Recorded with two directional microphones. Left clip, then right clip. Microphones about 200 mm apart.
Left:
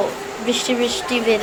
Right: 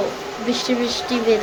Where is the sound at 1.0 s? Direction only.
15° right (ahead or behind).